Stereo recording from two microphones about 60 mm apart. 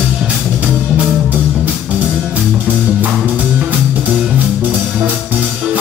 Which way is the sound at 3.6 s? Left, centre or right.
Right.